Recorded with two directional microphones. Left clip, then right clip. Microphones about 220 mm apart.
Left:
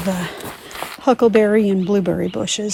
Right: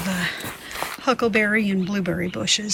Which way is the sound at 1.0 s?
15° left (ahead or behind).